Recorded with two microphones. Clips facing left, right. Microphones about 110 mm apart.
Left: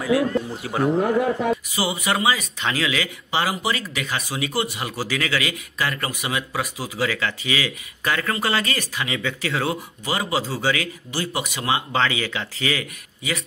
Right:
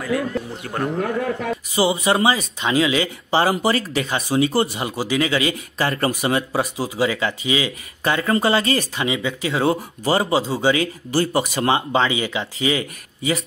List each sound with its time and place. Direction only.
0.0 s speech: centre (ahead or behind)
0.9 s speech: 15° left (ahead or behind)
1.8 s speech: 30° right (ahead or behind)
10.4 s speech: 20° right (ahead or behind)
11.1 s speech: 40° right (ahead or behind)
11.9 s speech: 20° right (ahead or behind)